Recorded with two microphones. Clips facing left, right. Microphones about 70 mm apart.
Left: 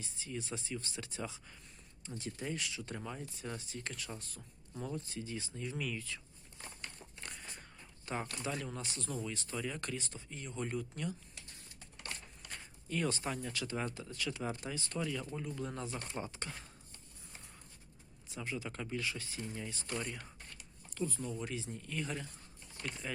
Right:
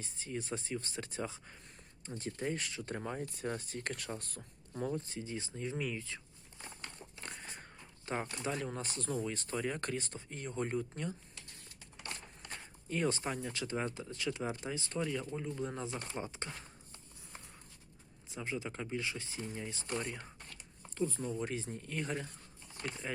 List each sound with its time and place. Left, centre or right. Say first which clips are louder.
0.0 s speech: right 2 dB; right
4.7 s speech: right 4 dB; right
7.3 s a sound: right 2 dB; right
8.1 s speech: right 2 dB; right
12.9 s speech: right 2 dB; right
18.3 s speech: right 2 dB; right
21.5 s speech: right 2 dB; right